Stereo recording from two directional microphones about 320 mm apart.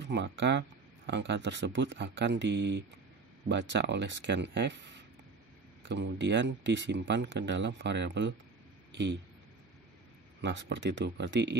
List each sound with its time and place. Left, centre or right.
0.0 s speech: right
10.4 s speech: right